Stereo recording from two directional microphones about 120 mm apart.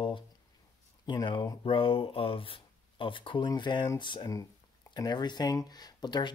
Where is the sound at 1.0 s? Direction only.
40° left (ahead or behind).